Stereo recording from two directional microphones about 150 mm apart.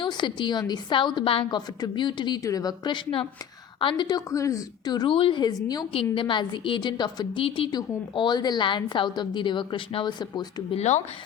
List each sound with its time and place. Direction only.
0.0 s a woman's voice: 30° left (ahead or behind)
10.8 s speech: 50° left (ahead or behind)